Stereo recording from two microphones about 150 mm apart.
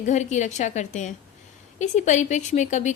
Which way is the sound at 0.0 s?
50° left (ahead or behind).